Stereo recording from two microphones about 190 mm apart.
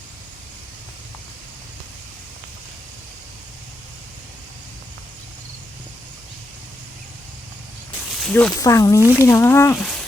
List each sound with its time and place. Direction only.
8.2 s speech: 5° left (ahead or behind)
8.5 s speech: 20° left (ahead or behind)
9.0 s speech: 10° right (ahead or behind)
9.2 s speech: 15° left (ahead or behind)